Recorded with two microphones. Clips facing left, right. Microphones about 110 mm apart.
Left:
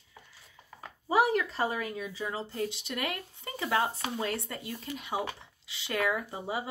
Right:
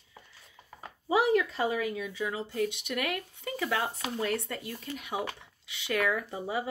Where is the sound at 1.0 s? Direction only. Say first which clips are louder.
Right 1 dB; 40° left (ahead or behind).